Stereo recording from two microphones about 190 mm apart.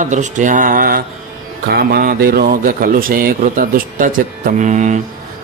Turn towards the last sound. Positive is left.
turn(degrees=-40)  # may be behind; listen again after turning